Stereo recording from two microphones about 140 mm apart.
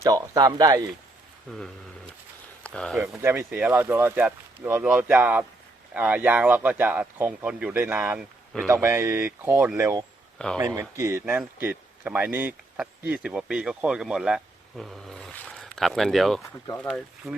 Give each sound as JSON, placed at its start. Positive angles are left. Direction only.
{"t": 0.0, "sound": "speech", "side_deg": -25}
{"t": 2.6, "sound": "speech", "side_deg": 5}
{"t": 3.2, "sound": "speech", "side_deg": -20}
{"t": 8.6, "sound": "speech", "side_deg": -20}
{"t": 10.3, "sound": "speech", "side_deg": 5}
{"t": 10.6, "sound": "speech", "side_deg": -25}
{"t": 16.4, "sound": "speech", "side_deg": 20}